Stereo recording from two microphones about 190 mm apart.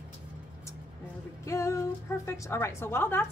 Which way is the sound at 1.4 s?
15° left (ahead or behind).